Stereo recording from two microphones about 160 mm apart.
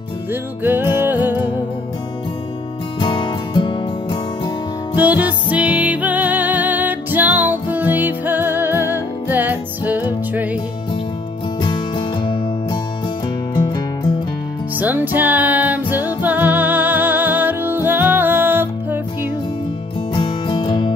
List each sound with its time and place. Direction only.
0.3 s music: 15° right (ahead or behind)
3.0 s music: 30° left (ahead or behind)
4.9 s music: 10° right (ahead or behind)
11.6 s music: 30° left (ahead or behind)
14.8 s music: 10° right (ahead or behind)
20.2 s music: 30° left (ahead or behind)